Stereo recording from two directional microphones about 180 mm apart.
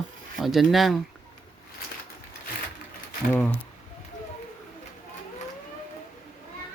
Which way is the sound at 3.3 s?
10° left (ahead or behind).